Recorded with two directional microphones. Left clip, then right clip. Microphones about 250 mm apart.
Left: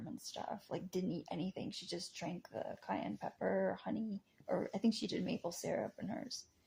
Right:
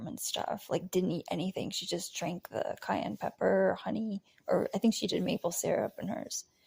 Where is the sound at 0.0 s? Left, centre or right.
Right.